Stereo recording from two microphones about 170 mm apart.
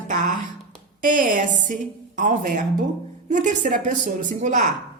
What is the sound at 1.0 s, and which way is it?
A woman's voice, 50° right (ahead or behind).